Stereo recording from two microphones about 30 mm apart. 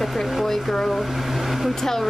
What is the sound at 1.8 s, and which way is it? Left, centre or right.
Speech, centre.